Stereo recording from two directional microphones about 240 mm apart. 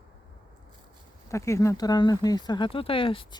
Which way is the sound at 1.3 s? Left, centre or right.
Centre.